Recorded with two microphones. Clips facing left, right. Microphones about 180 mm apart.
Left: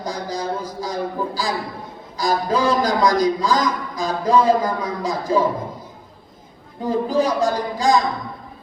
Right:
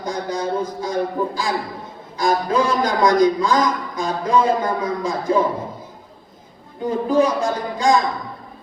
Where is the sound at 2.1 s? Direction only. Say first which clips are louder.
Right 2 dB; 35° left (ahead or behind).